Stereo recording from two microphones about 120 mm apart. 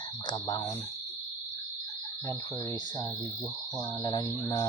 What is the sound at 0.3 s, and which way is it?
Mantra, 35° left (ahead or behind).